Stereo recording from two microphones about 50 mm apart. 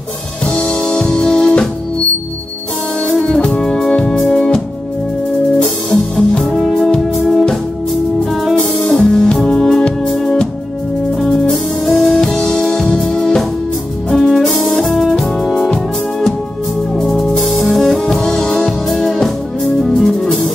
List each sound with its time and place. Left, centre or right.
0.5 s music: centre
3.2 s music: centre
5.9 s music: centre
7.2 s music: centre
14.1 s music: centre
16.9 s music: centre